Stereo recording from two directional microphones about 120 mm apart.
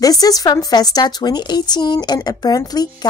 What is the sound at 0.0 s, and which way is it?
Speech, 30° left (ahead or behind).